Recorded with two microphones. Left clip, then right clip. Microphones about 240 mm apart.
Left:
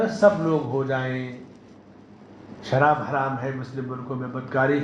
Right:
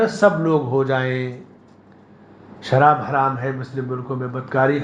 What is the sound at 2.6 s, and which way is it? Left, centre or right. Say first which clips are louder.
Speech: right 5 dB; right.